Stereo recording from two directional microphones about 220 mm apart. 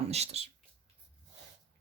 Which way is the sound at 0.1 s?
30° right (ahead or behind).